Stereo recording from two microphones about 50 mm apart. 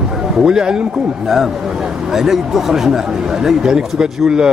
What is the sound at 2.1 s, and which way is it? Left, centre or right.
Speech, centre.